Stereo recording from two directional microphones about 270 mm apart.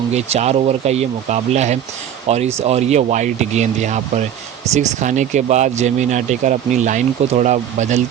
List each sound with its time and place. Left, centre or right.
0.1 s speech: right